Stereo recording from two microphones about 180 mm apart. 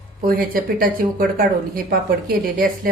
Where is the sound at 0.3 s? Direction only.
55° right (ahead or behind).